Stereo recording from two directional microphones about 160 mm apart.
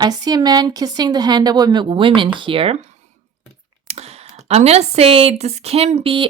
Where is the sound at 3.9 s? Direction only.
40° right (ahead or behind).